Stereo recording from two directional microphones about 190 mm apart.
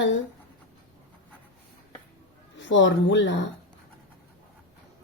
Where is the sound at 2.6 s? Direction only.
75° left (ahead or behind).